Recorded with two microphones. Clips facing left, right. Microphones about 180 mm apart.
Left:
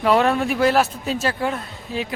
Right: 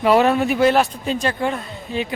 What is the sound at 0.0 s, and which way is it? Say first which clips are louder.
A man's voice: right 2 dB; 5° right (ahead or behind).